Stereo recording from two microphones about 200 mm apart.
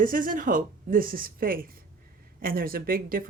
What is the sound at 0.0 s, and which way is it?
Speech, 45° right (ahead or behind).